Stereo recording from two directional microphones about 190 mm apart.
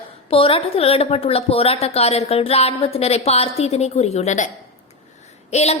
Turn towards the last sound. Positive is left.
turn(degrees=35)  # may be behind; listen again after turning